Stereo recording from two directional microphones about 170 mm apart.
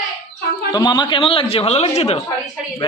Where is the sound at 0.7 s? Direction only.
25° left (ahead or behind).